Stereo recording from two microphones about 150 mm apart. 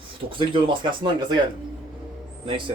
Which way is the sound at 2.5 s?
35° right (ahead or behind).